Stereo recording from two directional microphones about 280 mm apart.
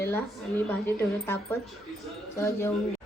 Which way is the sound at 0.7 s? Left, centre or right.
Centre.